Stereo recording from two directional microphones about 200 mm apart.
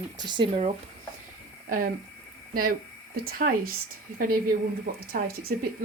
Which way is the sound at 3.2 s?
45° right (ahead or behind).